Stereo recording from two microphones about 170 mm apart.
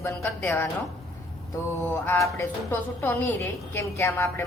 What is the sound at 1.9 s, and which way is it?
A woman's voice, 15° left (ahead or behind).